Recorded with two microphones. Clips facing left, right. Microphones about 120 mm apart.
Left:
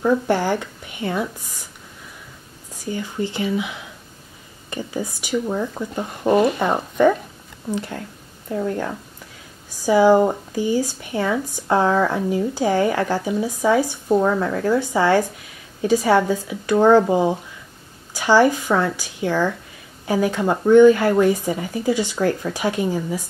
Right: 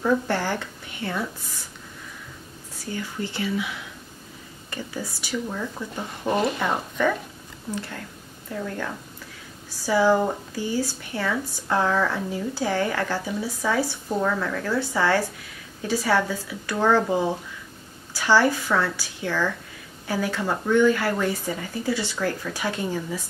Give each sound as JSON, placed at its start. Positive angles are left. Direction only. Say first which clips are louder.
{"t": 0.0, "sound": "speech", "louder": "left 4 dB", "side_deg": 15}
{"t": 2.8, "sound": "a woman's voice", "louder": "left 5 dB", "side_deg": 20}
{"t": 6.3, "sound": "speech", "louder": "left 6 dB", "side_deg": 40}
{"t": 8.5, "sound": "a woman's voice", "louder": "left 7 dB", "side_deg": 25}